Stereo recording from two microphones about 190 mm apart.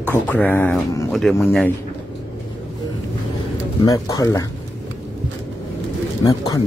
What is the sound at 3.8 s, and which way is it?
Speech, 20° left (ahead or behind).